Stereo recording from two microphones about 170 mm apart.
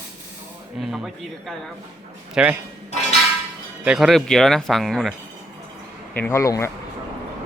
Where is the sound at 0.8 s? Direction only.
Centre (ahead or behind).